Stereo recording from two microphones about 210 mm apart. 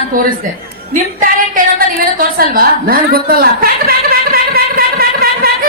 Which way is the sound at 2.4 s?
45° right (ahead or behind).